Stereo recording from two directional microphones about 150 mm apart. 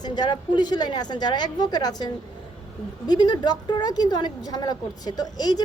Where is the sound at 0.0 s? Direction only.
30° left (ahead or behind).